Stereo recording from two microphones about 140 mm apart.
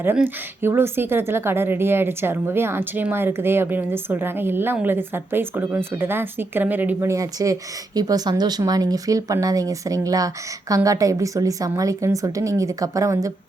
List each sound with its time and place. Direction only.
0.6 s speech: 15° right (ahead or behind)